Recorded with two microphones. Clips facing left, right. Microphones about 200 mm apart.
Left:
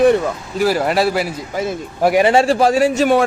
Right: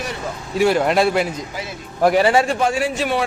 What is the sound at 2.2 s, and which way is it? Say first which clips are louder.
A man's voice: left 4 dB; 30° left (ahead or behind).